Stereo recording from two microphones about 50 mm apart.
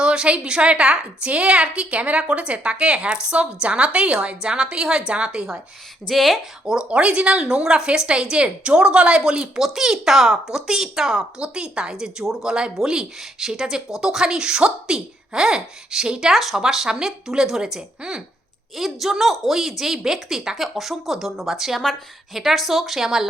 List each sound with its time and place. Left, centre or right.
0.0 s a woman's voice: centre
6.1 s speech: centre
6.7 s a woman's voice: centre
16.3 s a woman's voice: centre
18.8 s a woman's voice: centre